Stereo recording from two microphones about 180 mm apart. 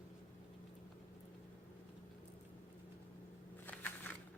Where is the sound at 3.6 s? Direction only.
10° left (ahead or behind).